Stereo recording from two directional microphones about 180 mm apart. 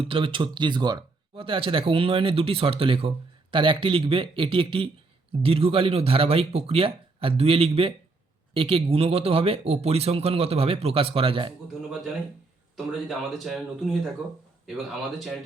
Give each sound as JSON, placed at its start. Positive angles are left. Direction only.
{"t": 0.0, "sound": "speech", "side_deg": -30}
{"t": 12.7, "sound": "speech", "side_deg": 0}